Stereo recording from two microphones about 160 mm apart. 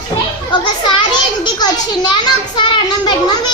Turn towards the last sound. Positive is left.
turn(degrees=30)  # may be behind; listen again after turning